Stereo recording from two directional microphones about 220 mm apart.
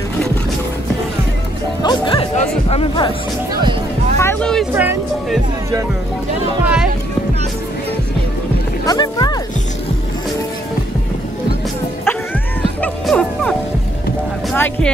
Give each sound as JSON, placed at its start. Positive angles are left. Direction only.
{"t": 1.8, "sound": "music", "side_deg": 20}
{"t": 2.7, "sound": "speech", "side_deg": 25}
{"t": 4.2, "sound": "music", "side_deg": 5}
{"t": 4.7, "sound": "speech", "side_deg": -10}
{"t": 8.8, "sound": "music", "side_deg": 20}
{"t": 12.8, "sound": "music", "side_deg": 5}
{"t": 14.5, "sound": "a sound", "side_deg": 5}